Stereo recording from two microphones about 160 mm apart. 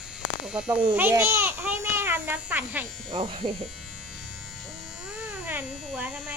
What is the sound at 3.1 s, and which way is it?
Speech, 30° right (ahead or behind).